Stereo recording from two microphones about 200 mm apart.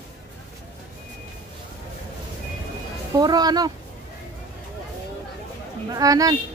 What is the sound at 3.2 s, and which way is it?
Speech, 20° right (ahead or behind).